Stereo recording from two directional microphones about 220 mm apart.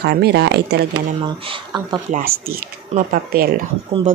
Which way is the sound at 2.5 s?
40° right (ahead or behind).